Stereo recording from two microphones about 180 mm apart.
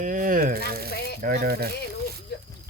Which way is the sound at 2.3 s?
65° left (ahead or behind).